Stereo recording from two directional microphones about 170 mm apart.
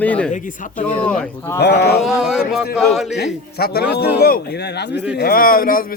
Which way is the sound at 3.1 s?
80° left.